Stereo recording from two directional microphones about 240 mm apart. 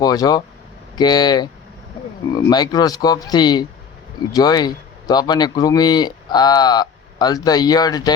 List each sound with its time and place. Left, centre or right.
0.0 s speech: centre